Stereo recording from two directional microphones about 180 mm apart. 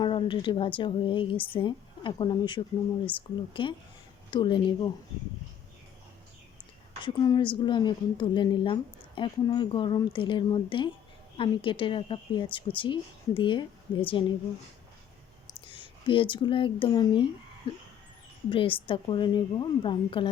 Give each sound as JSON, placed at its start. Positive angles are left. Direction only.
{"t": 0.0, "sound": "a woman's voice", "side_deg": 30}
{"t": 7.0, "sound": "a woman's voice", "side_deg": 25}
{"t": 15.6, "sound": "a woman's voice", "side_deg": 25}